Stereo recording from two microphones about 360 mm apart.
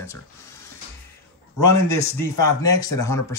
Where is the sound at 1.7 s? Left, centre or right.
Left.